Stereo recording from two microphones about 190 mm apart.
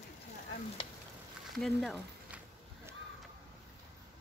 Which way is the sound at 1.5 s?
Centre (ahead or behind).